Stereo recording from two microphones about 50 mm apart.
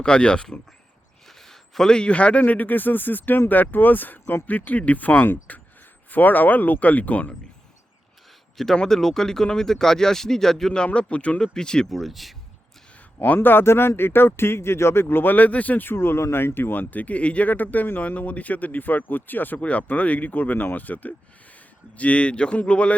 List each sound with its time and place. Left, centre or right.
0.0 s speech: centre
1.4 s a man's voice: centre; by 2.4 s left
2.4 s speech: left
8.5 s speech: centre
10.8 s speech: left
11.5 s speech: centre
11.9 s speech: centre
13.2 s speech: left
15.0 s speech: left
15.9 s speech: left
19.5 s speech: left